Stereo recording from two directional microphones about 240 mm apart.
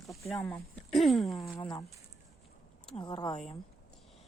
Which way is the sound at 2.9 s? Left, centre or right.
Centre.